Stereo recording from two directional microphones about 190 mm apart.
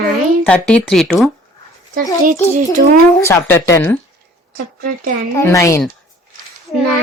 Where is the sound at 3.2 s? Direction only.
15° left (ahead or behind).